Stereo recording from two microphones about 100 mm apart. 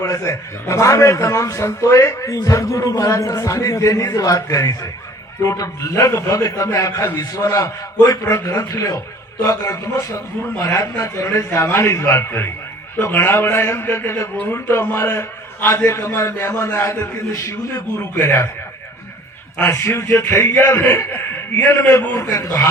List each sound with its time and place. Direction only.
0.0 s a man's voice: 35° left (ahead or behind)
19.5 s a man's voice: 20° left (ahead or behind)